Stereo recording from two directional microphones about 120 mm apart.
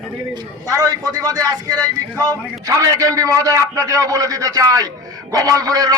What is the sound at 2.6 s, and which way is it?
A man's voice, 30° right (ahead or behind).